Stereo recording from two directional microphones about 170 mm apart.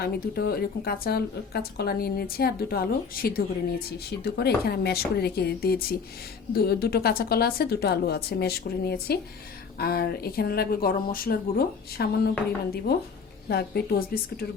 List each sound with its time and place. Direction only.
0.0 s a woman's voice: 65° left (ahead or behind)